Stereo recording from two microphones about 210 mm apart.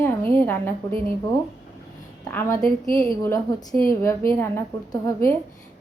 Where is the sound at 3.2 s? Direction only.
15° left (ahead or behind).